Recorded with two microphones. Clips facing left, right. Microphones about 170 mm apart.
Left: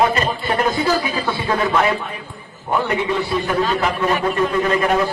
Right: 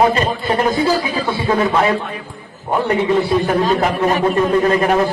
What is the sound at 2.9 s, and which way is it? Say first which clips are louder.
A man's voice: right 5 dB; 45° right (ahead or behind).